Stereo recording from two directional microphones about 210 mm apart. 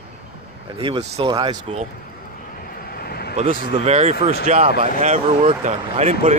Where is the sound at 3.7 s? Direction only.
30° right (ahead or behind).